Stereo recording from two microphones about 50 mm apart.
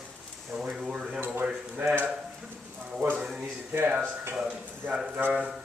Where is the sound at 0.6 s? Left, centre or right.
Centre.